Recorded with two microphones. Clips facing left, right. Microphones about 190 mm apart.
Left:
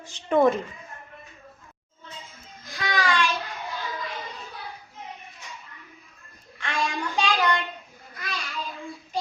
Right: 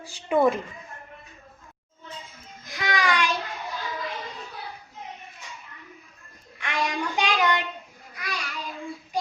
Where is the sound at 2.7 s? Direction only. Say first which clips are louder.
Even; 15° right (ahead or behind).